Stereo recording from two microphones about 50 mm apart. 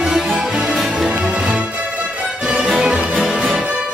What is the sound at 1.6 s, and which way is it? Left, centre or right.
Music, right.